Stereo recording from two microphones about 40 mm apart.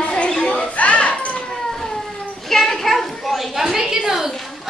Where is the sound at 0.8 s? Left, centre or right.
Left.